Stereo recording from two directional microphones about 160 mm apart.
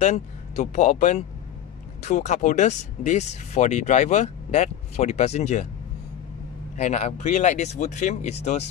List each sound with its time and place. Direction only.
0.0 s speech: 45° left (ahead or behind)
6.8 s speech: 45° left (ahead or behind)